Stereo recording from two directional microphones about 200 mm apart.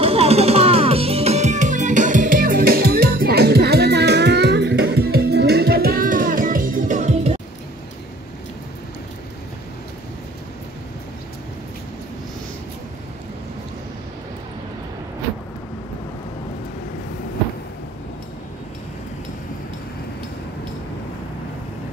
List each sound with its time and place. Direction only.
0.0 s music: 30° right (ahead or behind)